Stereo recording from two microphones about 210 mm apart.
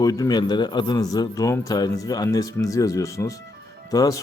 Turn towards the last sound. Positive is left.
turn(degrees=20)  # may be behind; listen again after turning